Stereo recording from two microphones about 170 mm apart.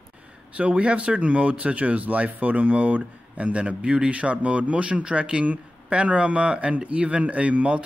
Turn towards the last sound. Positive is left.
turn(degrees=-5)  # may be behind; listen again after turning